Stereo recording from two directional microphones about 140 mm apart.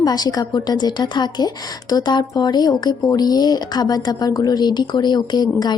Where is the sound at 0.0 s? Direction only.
30° left (ahead or behind).